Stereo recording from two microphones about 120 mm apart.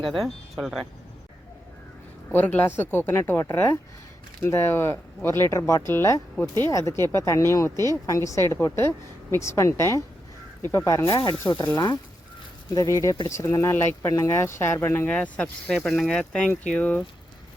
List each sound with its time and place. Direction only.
0.0 s speech: centre (ahead or behind)
2.3 s speech: 15° left (ahead or behind)
11.0 s speech: 40° left (ahead or behind)
12.7 s speech: 30° left (ahead or behind); by 17.0 s 10° left (ahead or behind)